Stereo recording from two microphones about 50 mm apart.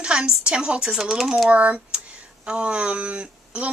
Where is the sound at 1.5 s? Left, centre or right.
Right.